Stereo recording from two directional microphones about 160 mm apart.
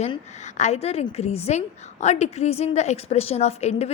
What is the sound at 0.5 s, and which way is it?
A woman's voice, 45° left (ahead or behind).